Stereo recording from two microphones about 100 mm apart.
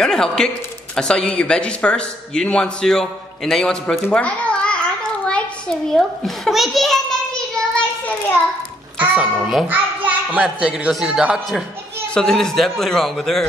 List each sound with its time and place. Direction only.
0.0 s a man's voice: 5° left (ahead or behind)
5.9 s a sound: centre (ahead or behind)
9.2 s a man's voice: 5° right (ahead or behind)
9.7 s a sound: 15° right (ahead or behind)
10.4 s a man's voice: 10° right (ahead or behind)
12.1 s a man's voice: 5° left (ahead or behind)